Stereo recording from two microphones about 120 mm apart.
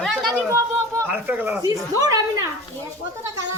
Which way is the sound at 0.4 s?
20° right (ahead or behind).